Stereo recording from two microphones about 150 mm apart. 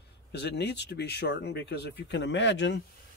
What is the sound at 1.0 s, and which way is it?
Speech, 90° left.